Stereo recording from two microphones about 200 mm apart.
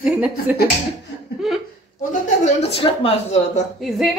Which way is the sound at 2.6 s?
30° left (ahead or behind).